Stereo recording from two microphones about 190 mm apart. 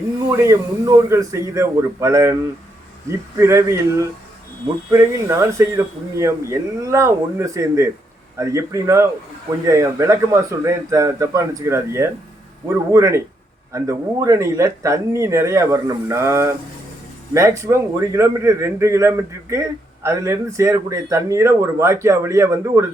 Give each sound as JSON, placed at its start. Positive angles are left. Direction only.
{"t": 0.3, "sound": "a man's voice", "side_deg": -15}